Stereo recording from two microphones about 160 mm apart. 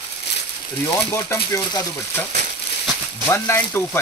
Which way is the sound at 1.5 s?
15° left (ahead or behind).